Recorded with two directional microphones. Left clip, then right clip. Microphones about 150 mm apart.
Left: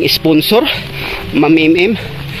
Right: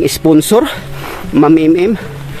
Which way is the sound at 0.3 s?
50° right (ahead or behind).